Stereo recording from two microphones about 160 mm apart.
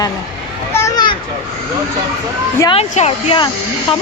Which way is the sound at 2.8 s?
40° left (ahead or behind).